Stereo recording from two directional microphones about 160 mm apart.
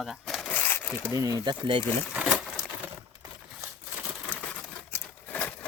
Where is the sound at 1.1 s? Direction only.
20° right (ahead or behind).